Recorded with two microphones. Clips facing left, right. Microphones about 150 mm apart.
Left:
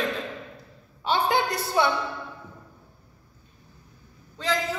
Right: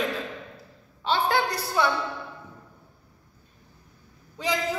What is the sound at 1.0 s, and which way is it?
Speech, 15° left (ahead or behind).